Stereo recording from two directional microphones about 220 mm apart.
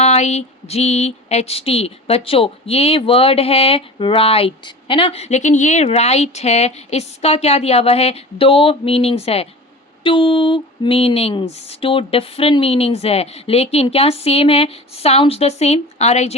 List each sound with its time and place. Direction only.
0.0 s speech: 30° left (ahead or behind)